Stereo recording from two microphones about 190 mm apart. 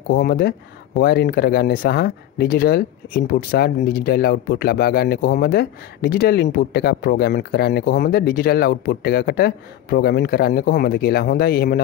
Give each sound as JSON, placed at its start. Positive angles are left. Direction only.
{"t": 0.1, "sound": "speech", "side_deg": 55}